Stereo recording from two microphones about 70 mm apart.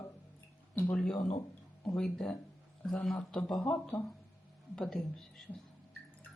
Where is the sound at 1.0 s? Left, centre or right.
Centre.